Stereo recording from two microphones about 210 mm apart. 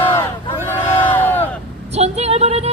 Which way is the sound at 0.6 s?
10° left (ahead or behind).